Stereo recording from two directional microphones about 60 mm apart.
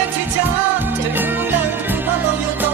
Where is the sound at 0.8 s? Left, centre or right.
Right.